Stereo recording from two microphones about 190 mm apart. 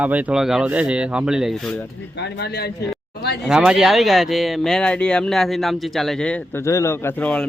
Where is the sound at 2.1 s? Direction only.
60° left (ahead or behind).